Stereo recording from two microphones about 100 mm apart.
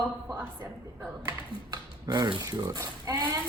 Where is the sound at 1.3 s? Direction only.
40° right (ahead or behind).